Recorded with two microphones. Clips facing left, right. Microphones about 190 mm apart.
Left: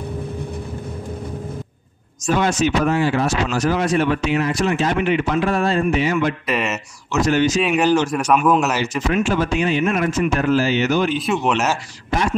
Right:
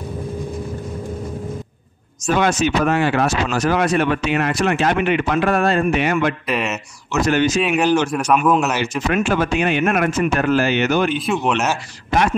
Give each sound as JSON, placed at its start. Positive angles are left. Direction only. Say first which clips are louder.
{"t": 2.3, "sound": "speech", "louder": "right 1 dB", "side_deg": -65}
{"t": 6.4, "sound": "speech", "louder": "even", "side_deg": 0}
{"t": 7.2, "sound": "speech", "louder": "even", "side_deg": -60}
{"t": 7.6, "sound": "speech", "louder": "even", "side_deg": 0}
{"t": 9.1, "sound": "speech", "louder": "right 1 dB", "side_deg": -60}
{"t": 11.1, "sound": "speech", "louder": "even", "side_deg": 0}